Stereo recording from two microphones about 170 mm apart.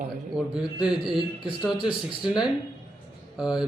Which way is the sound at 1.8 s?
30° left (ahead or behind).